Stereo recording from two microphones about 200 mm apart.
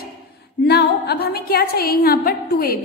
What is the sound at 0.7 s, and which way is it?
A woman's voice, 55° left (ahead or behind).